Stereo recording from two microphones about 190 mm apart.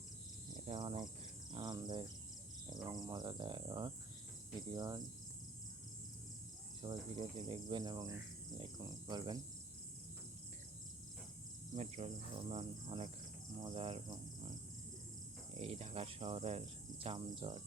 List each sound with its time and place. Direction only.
0.7 s cricket: 25° right (ahead or behind)
1.0 s speech: 20° right (ahead or behind)
2.8 s cricket: 20° right (ahead or behind)
6.8 s cricket: 25° right (ahead or behind)
11.7 s cricket: 35° right (ahead or behind)
15.6 s cricket: 30° right (ahead or behind)